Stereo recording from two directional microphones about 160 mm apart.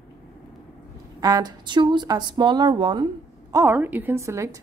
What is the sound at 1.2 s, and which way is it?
A woman's voice, 25° right (ahead or behind).